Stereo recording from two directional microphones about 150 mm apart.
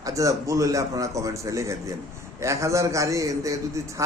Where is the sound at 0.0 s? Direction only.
20° right (ahead or behind).